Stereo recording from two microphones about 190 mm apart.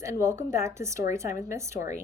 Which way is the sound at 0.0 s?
15° right (ahead or behind).